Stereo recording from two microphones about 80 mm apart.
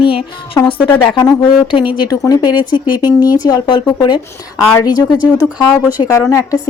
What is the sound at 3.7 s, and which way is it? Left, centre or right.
Speech, left.